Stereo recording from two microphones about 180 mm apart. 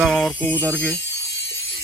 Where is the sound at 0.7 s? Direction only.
75° left (ahead or behind).